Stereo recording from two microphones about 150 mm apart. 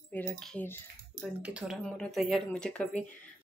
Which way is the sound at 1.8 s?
5° left (ahead or behind).